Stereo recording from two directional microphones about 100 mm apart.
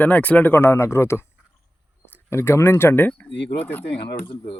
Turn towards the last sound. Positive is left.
turn(degrees=20)  # may be behind; listen again after turning